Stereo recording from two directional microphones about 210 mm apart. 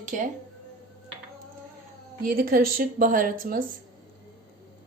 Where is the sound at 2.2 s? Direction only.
45° right (ahead or behind).